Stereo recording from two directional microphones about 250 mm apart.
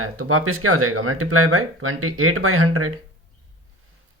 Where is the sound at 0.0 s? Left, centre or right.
Right.